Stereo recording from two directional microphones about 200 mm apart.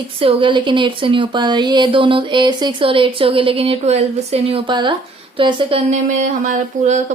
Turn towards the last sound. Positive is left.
turn(degrees=-35)  # may be behind; listen again after turning